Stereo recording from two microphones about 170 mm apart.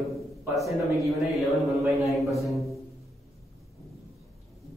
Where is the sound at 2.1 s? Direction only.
Centre (ahead or behind).